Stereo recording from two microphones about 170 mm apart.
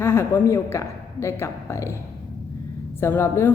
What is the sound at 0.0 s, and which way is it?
A woman's voice, 15° left (ahead or behind).